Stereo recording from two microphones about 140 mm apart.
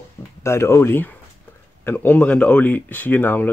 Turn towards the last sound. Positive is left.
turn(degrees=15)  # may be behind; listen again after turning